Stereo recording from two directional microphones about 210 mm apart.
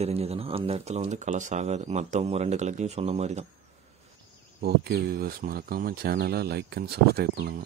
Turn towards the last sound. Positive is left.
turn(degrees=-50)  # may be behind; listen again after turning